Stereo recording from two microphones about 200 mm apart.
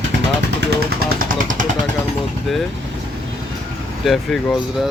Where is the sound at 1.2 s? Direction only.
45° right (ahead or behind).